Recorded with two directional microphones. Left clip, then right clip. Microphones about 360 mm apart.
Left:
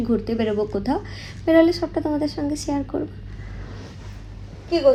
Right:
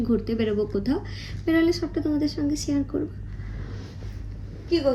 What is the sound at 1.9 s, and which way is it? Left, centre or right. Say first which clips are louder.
Speech: left 2 dB; left.